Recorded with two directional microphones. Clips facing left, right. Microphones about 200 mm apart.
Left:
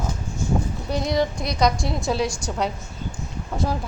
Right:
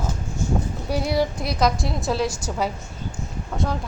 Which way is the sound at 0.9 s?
10° right (ahead or behind).